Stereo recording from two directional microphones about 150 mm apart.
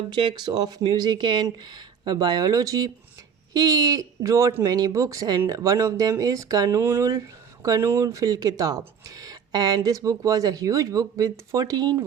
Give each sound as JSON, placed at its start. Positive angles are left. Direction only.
{"t": 0.1, "sound": "speech", "side_deg": -30}